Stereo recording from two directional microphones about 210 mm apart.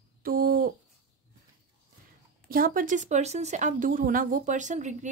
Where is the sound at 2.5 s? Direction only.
40° right (ahead or behind).